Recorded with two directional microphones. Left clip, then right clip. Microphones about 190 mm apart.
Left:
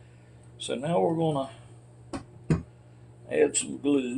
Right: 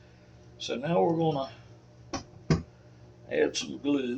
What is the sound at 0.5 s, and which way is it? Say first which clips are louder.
Speech: left 1 dB; 30° left (ahead or behind).